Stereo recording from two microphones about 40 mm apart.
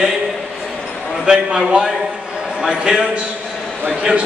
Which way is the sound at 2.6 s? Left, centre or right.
Right.